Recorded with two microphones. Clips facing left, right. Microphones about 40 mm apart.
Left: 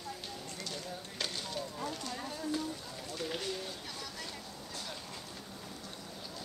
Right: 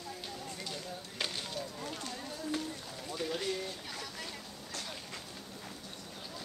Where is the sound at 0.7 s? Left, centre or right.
Centre.